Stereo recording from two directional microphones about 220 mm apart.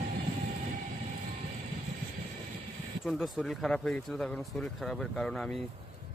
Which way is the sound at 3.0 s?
Centre (ahead or behind).